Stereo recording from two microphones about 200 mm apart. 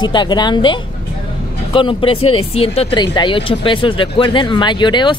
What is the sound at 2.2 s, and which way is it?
Speech, 90° left.